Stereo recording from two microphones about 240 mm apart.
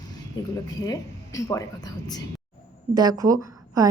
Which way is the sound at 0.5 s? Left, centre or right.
Centre.